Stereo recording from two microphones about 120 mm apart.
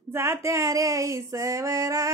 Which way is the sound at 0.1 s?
20° right (ahead or behind).